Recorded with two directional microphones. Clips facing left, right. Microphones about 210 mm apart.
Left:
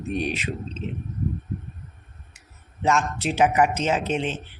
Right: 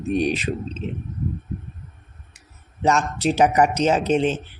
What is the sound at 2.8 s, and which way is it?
Speech, 35° right (ahead or behind).